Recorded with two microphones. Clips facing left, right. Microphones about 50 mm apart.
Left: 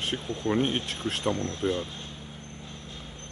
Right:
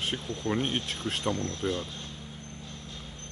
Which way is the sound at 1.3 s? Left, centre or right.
Left.